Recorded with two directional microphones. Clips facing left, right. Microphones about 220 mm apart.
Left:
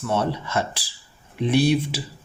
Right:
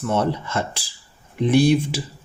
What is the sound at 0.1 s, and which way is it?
Speech, 50° right (ahead or behind).